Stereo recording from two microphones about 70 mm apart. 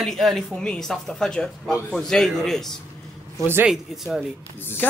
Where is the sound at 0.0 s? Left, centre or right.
Centre.